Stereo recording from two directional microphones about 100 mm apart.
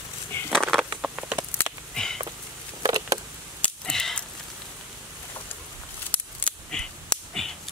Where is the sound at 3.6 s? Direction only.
5° left (ahead or behind).